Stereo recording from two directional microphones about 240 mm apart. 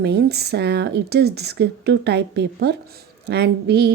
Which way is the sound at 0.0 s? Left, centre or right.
Right.